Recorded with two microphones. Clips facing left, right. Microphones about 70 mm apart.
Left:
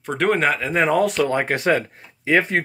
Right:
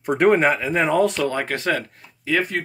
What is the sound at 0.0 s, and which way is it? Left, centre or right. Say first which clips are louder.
Speech: right 3 dB; centre.